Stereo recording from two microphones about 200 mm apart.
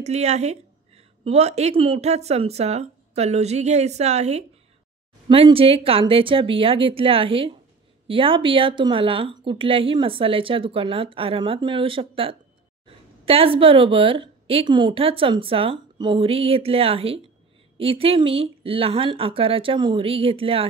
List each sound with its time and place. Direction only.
0.0 s a woman's voice: 35° right (ahead or behind)